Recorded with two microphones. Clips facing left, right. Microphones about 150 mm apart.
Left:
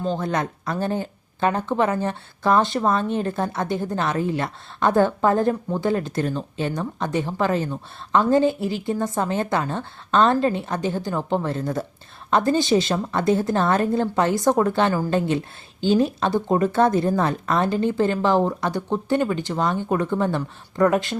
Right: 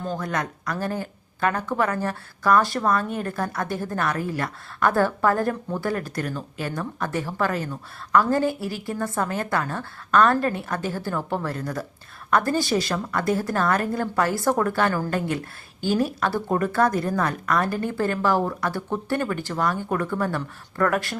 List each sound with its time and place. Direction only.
0.0 s speech: 25° left (ahead or behind)